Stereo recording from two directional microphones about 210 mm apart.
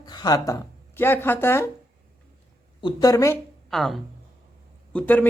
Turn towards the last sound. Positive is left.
turn(degrees=10)  # may be behind; listen again after turning